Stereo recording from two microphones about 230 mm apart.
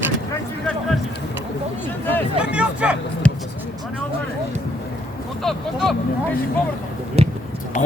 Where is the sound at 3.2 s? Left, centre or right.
Centre.